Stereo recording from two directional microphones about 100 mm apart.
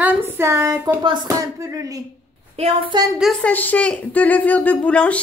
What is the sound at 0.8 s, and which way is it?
Speech, 50° right (ahead or behind).